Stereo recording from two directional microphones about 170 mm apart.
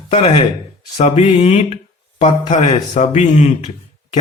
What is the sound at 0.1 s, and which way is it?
Speech, 35° left (ahead or behind).